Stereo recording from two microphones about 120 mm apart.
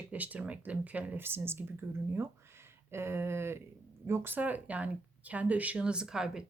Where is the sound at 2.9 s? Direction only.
20° right (ahead or behind).